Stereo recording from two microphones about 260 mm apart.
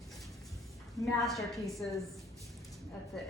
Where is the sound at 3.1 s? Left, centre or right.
Centre.